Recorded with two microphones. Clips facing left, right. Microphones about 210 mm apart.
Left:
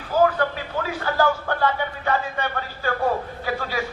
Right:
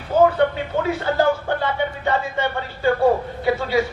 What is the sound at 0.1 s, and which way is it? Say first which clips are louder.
A man's voice: right 4 dB; 25° right (ahead or behind).